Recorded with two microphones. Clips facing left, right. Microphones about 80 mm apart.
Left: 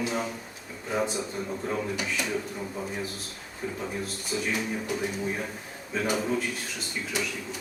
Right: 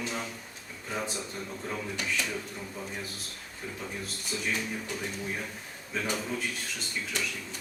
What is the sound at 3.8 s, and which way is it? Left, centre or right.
A man's voice, centre.